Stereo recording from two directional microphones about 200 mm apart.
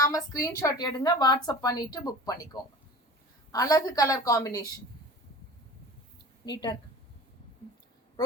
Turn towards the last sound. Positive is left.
turn(degrees=20)  # may be behind; listen again after turning